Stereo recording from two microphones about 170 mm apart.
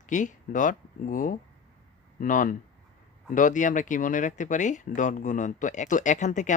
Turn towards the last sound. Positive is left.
turn(degrees=45)  # may be behind; listen again after turning